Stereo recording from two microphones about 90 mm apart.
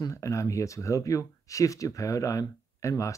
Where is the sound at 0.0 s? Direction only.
35° left (ahead or behind).